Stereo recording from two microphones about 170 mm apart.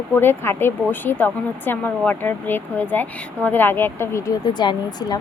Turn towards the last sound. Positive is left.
turn(degrees=25)  # may be behind; listen again after turning